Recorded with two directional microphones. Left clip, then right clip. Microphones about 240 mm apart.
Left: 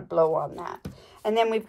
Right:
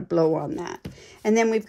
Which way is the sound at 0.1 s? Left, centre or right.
Right.